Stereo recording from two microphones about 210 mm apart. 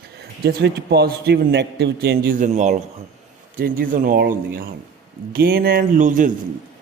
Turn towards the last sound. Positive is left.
turn(degrees=-40)  # may be behind; listen again after turning